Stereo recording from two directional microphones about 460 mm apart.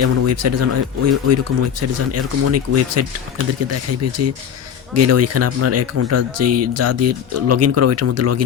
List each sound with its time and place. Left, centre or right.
0.0 s speech: right